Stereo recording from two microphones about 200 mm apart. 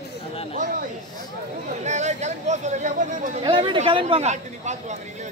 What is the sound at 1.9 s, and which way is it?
Speech, 35° right (ahead or behind).